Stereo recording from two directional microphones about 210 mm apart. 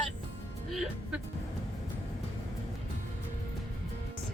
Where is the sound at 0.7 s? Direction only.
Centre (ahead or behind).